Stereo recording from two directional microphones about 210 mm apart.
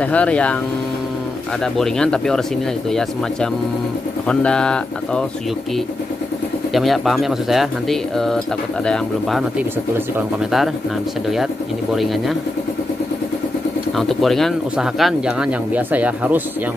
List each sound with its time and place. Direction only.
0.0 s speech: 5° left (ahead or behind)
1.8 s speech: 5° left (ahead or behind)
6.7 s speech: centre (ahead or behind)
13.9 s speech: centre (ahead or behind)